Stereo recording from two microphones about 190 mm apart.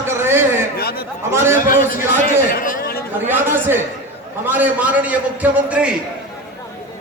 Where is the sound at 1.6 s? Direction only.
45° left (ahead or behind).